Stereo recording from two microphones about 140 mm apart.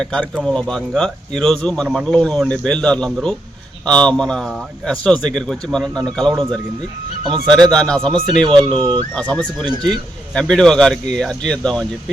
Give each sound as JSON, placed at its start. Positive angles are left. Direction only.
{"t": 0.0, "sound": "speech", "side_deg": 5}
{"t": 7.4, "sound": "speech", "side_deg": 5}
{"t": 8.6, "sound": "speech", "side_deg": -35}
{"t": 9.1, "sound": "speech", "side_deg": 5}